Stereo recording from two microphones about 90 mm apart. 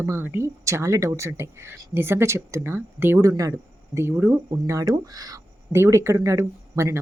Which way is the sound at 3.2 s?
35° right (ahead or behind).